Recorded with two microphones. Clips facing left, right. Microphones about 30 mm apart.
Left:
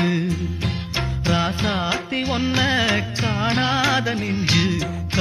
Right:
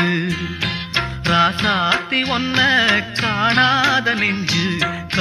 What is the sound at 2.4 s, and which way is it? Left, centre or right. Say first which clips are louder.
Music: right 4 dB; right.